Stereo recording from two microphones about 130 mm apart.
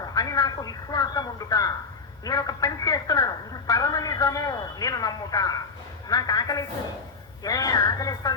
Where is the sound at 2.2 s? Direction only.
30° left (ahead or behind).